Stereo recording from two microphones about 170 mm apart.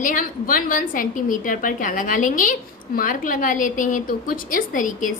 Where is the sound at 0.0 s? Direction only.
50° left (ahead or behind).